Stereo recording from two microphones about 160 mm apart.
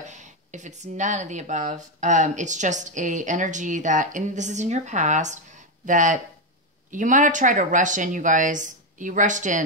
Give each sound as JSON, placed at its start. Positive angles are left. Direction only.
{"t": 0.0, "sound": "speech", "side_deg": -50}